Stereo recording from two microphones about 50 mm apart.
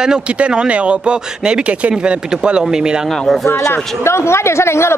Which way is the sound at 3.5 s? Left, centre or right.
Left.